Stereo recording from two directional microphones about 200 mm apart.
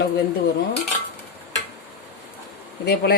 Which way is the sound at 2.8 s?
55° left (ahead or behind).